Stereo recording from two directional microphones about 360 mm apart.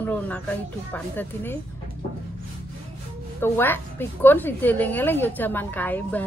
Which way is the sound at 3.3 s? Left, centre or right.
Centre.